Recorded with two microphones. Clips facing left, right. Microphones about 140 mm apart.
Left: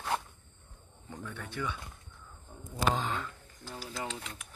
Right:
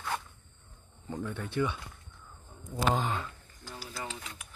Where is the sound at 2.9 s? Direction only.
10° right (ahead or behind).